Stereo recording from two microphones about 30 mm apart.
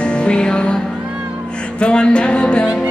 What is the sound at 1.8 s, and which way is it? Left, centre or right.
Music, left.